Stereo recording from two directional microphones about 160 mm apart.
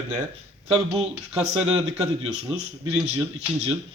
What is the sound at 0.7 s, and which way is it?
Speech, 40° right (ahead or behind).